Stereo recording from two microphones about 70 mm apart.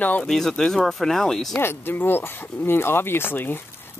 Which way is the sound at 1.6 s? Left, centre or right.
Left.